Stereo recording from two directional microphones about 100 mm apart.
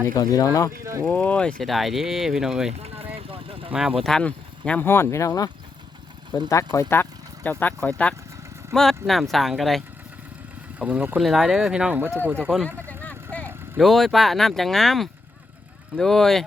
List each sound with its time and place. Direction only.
0.1 s speech: 40° left (ahead or behind)
1.0 s speech: 10° left (ahead or behind)
2.8 s vehicle: 80° right
3.2 s vehicle: 70° right (ahead or behind)
3.7 s speech: 5° right (ahead or behind)
4.0 s speech: 10° left (ahead or behind)
4.9 s speech: 25° left (ahead or behind)
6.5 s speech: 30° left (ahead or behind)
6.9 s vehicle: 20° left (ahead or behind)
7.6 s speech: 15° left (ahead or behind)
10.8 s speech: 15° right (ahead or behind)
11.2 s speech: centre (ahead or behind)
12.6 s vehicle: 15° left (ahead or behind)
13.7 s speech: centre (ahead or behind)